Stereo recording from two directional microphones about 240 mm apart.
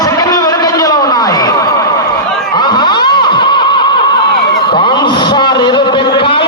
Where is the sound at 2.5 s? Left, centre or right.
Centre.